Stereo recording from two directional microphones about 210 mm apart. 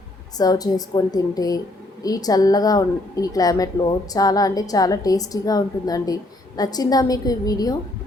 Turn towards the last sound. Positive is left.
turn(degrees=15)  # may be behind; listen again after turning